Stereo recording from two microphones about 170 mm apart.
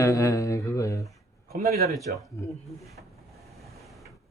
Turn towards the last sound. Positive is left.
turn(degrees=0)  # may be behind; listen again after turning